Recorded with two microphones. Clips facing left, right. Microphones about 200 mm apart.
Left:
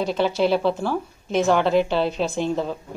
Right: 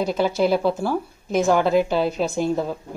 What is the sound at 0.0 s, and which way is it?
A woman's voice, 10° right (ahead or behind).